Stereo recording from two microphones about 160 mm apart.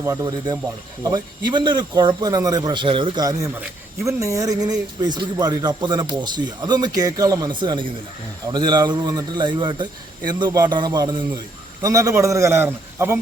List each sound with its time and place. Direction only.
0.0 s a man's voice: 20° right (ahead or behind)